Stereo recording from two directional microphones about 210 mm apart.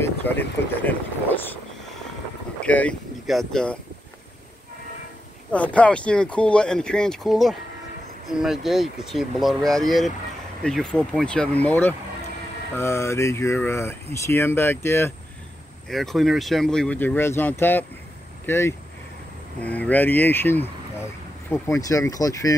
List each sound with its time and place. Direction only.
0.0 s speech: 10° left (ahead or behind)
5.5 s speech: 5° left (ahead or behind)